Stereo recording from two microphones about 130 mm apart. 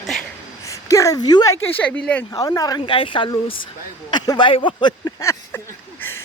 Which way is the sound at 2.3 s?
25° left (ahead or behind).